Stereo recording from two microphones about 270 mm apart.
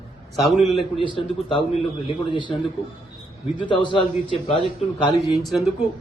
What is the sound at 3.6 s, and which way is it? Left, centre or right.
A man's voice, centre.